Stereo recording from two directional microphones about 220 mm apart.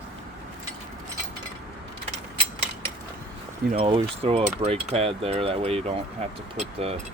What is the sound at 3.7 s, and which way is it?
Speech, 25° right (ahead or behind).